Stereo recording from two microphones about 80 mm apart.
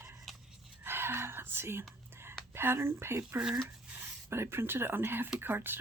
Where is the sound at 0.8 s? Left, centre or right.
Right.